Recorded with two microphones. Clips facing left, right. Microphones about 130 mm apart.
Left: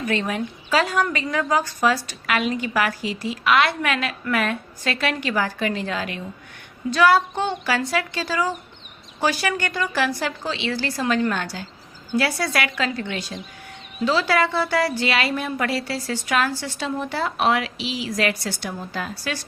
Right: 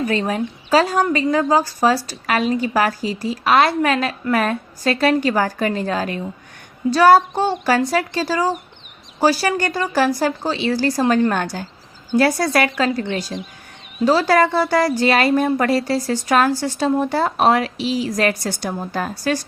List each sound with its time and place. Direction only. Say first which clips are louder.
0.1 s a woman's voice: right 4 dB; 35° right (ahead or behind)